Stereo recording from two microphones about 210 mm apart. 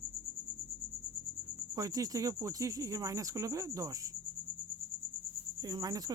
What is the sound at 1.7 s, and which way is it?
Speech, 15° right (ahead or behind).